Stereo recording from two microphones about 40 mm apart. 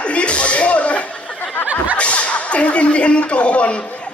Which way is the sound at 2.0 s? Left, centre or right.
Left.